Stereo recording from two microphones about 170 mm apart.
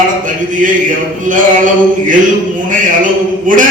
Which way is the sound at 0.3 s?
50° right (ahead or behind).